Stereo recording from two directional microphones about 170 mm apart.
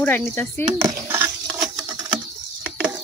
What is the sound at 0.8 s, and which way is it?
Patter, 15° right (ahead or behind).